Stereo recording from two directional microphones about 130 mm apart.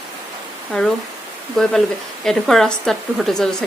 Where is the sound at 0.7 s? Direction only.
5° left (ahead or behind).